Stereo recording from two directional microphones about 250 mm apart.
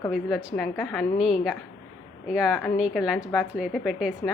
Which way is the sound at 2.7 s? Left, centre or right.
Centre.